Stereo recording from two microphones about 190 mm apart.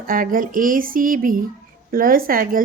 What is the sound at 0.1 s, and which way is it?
A woman's voice, 45° right (ahead or behind).